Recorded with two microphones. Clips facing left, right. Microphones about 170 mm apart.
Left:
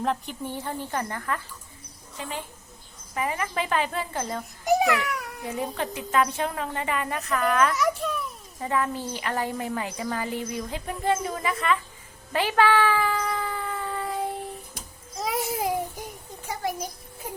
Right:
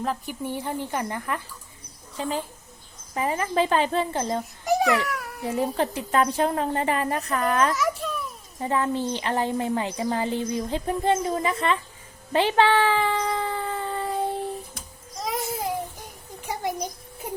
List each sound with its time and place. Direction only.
0.0 s a woman's voice: centre (ahead or behind)
0.4 s speech: 15° right (ahead or behind)
2.1 s a woman's voice: 30° right (ahead or behind)
4.6 s babbling: centre (ahead or behind)
5.5 s a woman's voice: 35° right (ahead or behind)
7.8 s babbling: centre (ahead or behind)
8.6 s speech: 30° right (ahead or behind)
12.3 s a sound: 25° right (ahead or behind)
15.1 s babbling: centre (ahead or behind)
16.5 s a sound: 20° right (ahead or behind)